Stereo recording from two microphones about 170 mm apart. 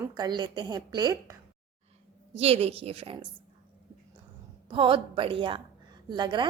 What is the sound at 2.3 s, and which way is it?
Speech, 35° right (ahead or behind).